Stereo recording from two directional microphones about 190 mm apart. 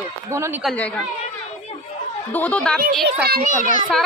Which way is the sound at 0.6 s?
5° left (ahead or behind).